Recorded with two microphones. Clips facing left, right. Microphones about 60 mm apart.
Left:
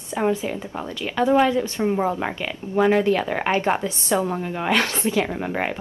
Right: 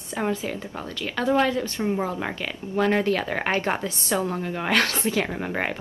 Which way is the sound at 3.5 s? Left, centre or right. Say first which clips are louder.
Left 4 dB; left.